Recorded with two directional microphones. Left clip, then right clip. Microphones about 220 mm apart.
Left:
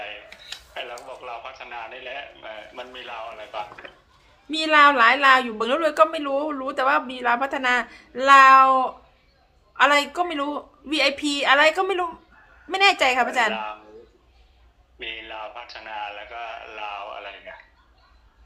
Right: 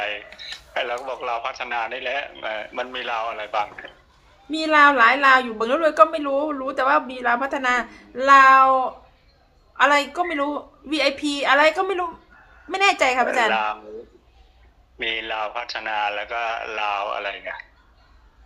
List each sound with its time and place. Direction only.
0.7 s radio: 50° right (ahead or behind)
1.0 s a man's voice: 45° right (ahead or behind)
4.5 s a woman's voice: 10° left (ahead or behind)
13.5 s a man's voice: 45° right (ahead or behind)
14.9 s a man's voice: 45° right (ahead or behind)